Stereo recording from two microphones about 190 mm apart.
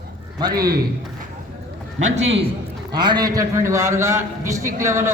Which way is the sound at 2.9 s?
20° right (ahead or behind).